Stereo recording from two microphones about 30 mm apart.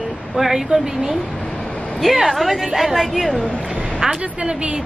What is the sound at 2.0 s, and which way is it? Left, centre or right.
A woman's voice, centre.